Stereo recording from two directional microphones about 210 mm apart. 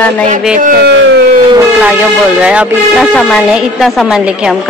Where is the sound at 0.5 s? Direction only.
40° right (ahead or behind).